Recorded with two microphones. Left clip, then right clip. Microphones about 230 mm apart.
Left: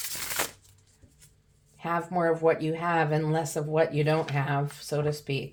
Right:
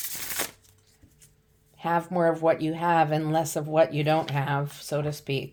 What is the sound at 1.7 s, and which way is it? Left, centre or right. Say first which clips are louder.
Speech: right 3 dB; right.